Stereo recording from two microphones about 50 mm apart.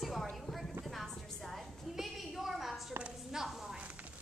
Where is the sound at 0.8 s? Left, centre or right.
Centre.